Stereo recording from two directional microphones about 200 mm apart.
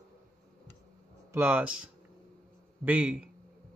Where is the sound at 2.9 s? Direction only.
5° right (ahead or behind).